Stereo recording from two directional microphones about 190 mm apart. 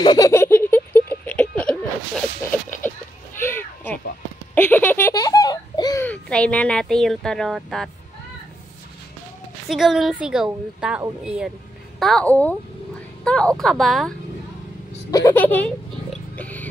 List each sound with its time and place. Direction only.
0.0 s a sound: 20° left (ahead or behind)
4.6 s giggle: 10° left (ahead or behind)
6.2 s speech: 5° left (ahead or behind)
9.7 s a woman's voice: centre (ahead or behind)
15.0 s cat: 15° left (ahead or behind)